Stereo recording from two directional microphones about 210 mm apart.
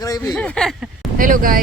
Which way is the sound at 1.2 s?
40° right (ahead or behind).